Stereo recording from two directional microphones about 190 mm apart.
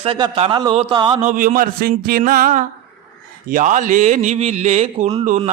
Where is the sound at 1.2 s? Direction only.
45° right (ahead or behind).